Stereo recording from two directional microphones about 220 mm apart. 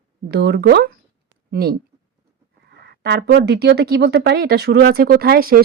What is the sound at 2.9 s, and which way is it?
Speech, 45° right (ahead or behind).